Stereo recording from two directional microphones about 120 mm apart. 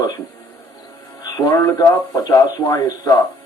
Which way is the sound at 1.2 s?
30° left (ahead or behind).